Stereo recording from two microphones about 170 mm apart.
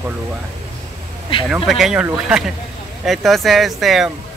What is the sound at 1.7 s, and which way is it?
Speech, centre (ahead or behind).